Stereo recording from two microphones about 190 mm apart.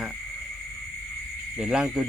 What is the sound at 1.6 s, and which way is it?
Speech, 5° right (ahead or behind).